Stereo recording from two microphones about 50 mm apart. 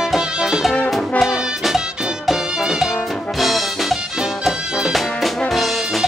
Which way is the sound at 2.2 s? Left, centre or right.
Centre.